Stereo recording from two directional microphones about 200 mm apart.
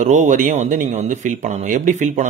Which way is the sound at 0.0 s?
35° right (ahead or behind).